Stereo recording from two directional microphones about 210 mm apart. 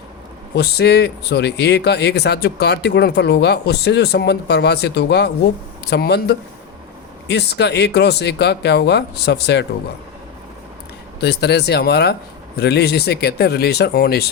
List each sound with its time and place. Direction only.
0.5 s speech: 50° left (ahead or behind)
11.2 s speech: 50° left (ahead or behind)